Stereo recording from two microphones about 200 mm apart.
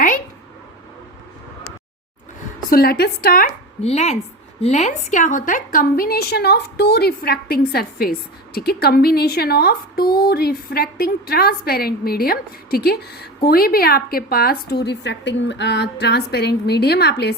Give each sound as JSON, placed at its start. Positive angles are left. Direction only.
{"t": 2.6, "sound": "speech", "side_deg": 50}
{"t": 3.8, "sound": "speech", "side_deg": 30}